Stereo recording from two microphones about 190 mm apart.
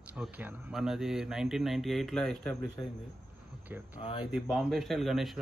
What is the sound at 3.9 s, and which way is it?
Speech, 30° left (ahead or behind).